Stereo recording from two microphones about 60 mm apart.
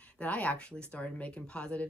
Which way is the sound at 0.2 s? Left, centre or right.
Left.